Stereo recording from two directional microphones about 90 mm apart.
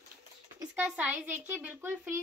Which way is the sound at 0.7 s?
15° right (ahead or behind).